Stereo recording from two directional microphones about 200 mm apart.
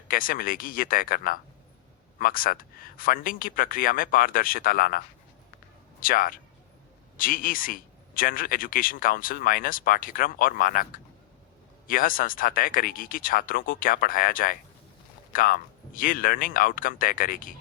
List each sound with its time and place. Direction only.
0.1 s speech: 45° left (ahead or behind)